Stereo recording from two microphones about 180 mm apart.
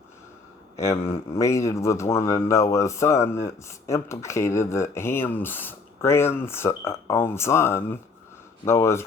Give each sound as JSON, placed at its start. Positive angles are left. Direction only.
{"t": 0.8, "sound": "speech", "side_deg": 15}